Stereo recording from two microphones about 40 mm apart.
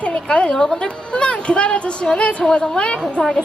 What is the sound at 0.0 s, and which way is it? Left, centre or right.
A woman's voice, left.